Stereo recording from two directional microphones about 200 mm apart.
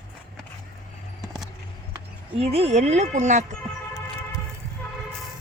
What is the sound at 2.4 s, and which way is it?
Speech, 30° right (ahead or behind).